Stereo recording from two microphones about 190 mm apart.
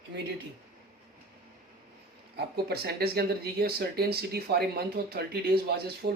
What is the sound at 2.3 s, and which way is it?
Speech, 60° right (ahead or behind).